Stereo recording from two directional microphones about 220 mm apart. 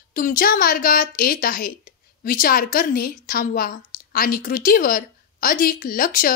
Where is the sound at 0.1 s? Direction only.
40° left (ahead or behind).